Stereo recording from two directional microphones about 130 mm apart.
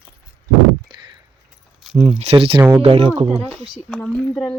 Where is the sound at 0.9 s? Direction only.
40° right (ahead or behind).